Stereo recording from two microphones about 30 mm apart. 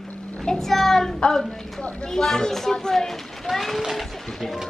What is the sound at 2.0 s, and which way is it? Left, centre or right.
A child's voice, centre.